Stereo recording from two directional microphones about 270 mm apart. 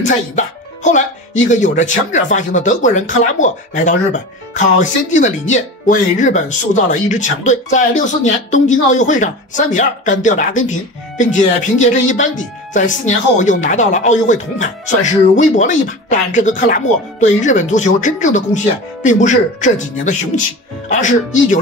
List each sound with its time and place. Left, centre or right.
0.0 s speech: left